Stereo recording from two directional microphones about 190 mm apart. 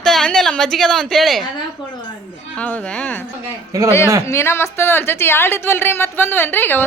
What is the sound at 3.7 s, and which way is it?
Speech, 15° right (ahead or behind).